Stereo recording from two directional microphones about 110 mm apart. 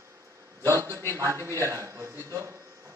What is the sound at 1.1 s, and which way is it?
A man's voice, 25° right (ahead or behind).